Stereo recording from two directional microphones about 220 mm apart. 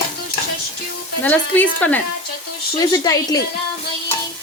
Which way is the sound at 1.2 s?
5° left (ahead or behind).